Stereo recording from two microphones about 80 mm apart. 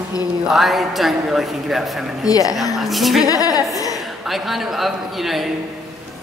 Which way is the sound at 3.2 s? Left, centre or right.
Left.